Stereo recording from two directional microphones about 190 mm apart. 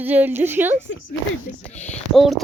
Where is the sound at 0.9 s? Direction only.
70° left (ahead or behind).